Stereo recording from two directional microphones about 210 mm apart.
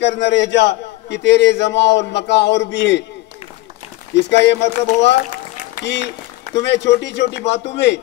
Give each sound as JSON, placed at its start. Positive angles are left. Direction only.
{"t": 0.0, "sound": "a man's voice", "side_deg": 55}
{"t": 4.1, "sound": "a man's voice", "side_deg": 55}
{"t": 4.6, "sound": "speech", "side_deg": 35}
{"t": 5.9, "sound": "a man's voice", "side_deg": 55}